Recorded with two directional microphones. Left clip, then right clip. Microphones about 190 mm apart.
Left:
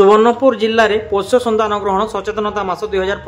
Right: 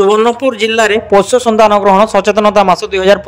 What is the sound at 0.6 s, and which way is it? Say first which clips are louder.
A man's voice: right 3 dB; 40° right (ahead or behind).